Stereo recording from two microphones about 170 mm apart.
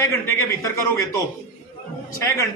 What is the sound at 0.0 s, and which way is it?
A man's voice, 15° left (ahead or behind).